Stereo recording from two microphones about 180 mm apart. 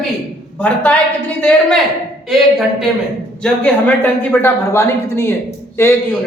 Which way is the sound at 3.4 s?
5° left (ahead or behind).